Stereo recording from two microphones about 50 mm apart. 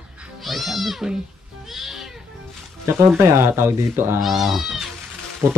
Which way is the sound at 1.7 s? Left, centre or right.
Centre.